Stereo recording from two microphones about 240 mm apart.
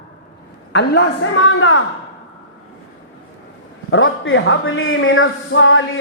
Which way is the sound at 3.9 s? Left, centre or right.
Left.